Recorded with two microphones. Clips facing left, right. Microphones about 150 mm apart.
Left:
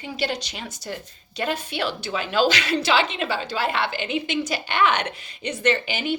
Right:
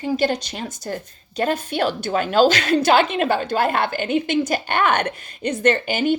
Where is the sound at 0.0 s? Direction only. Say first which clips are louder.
Right 7 dB; 45° right (ahead or behind).